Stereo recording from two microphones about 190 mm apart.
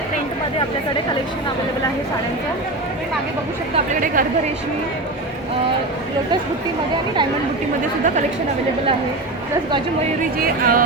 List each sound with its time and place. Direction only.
4.0 s speech: 45° right (ahead or behind)
10.4 s speech: 50° right (ahead or behind)